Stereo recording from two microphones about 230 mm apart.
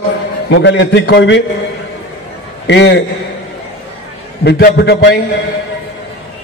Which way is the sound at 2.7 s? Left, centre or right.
Left.